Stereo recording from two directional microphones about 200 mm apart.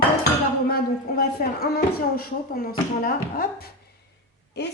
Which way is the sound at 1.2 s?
50° left (ahead or behind).